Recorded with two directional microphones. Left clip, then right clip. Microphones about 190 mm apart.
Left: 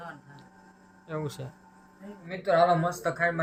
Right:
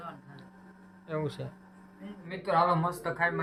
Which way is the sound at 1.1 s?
Centre (ahead or behind).